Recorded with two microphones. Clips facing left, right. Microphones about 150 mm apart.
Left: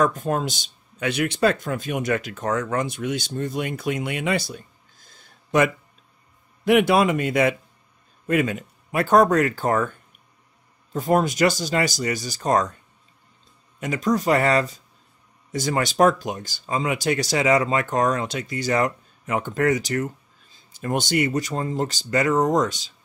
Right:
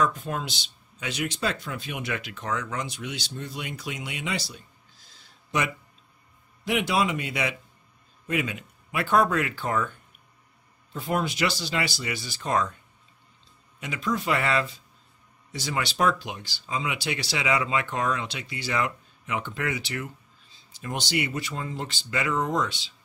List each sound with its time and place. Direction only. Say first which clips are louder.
0.0 s speech: left 5 dB; 45° left (ahead or behind)
13.7 s speech: left 7 dB; 45° left (ahead or behind)